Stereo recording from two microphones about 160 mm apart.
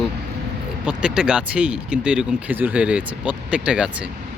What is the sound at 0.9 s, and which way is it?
Speech, 5° right (ahead or behind).